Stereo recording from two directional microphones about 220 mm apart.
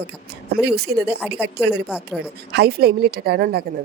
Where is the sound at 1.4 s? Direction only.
50° right (ahead or behind).